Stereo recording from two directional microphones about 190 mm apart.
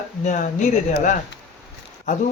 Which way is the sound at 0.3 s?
40° left (ahead or behind).